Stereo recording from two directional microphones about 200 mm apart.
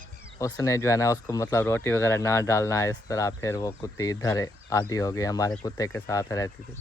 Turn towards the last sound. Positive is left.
turn(degrees=15)  # may be behind; listen again after turning